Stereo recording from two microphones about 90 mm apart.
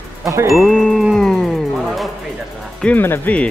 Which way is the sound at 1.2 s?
5° left (ahead or behind).